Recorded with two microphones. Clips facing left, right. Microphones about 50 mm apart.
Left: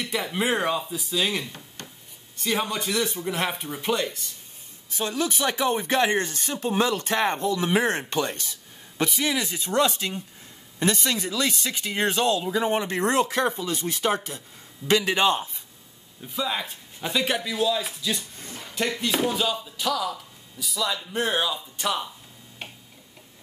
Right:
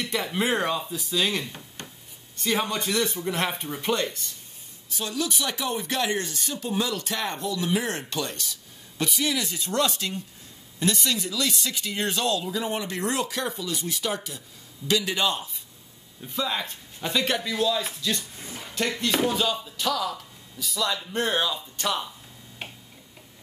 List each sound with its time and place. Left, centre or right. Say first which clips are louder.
0.0 s a man's voice: even; centre
1.8 s a sound: right 1 dB; centre
2.3 s speech: even; centre
4.8 s speech: left 3 dB; left
10.8 s speech: left 2 dB; left
16.2 s a man's voice: even; centre
18.3 s a sound: right 1 dB; centre
18.8 s a man's voice: even; centre
22.6 s tick-tock: right 1 dB; centre